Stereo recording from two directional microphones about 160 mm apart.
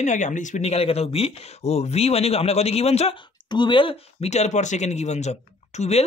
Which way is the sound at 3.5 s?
30° left (ahead or behind).